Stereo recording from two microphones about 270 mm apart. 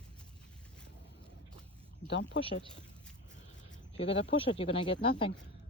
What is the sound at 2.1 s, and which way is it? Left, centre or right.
Speech, left.